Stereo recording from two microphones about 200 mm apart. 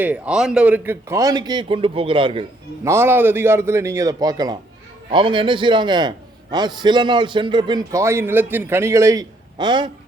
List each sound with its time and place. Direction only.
0.0 s a man's voice: 5° right (ahead or behind); by 2.5 s 25° right (ahead or behind)
2.8 s a man's voice: 10° right (ahead or behind)